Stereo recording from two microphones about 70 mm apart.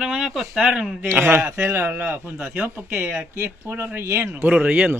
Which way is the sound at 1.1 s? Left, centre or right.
Right.